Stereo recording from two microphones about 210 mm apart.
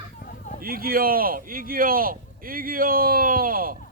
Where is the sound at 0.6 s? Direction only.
45° right (ahead or behind).